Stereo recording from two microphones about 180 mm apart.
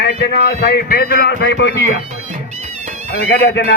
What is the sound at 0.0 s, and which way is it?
A man's voice, 70° left (ahead or behind).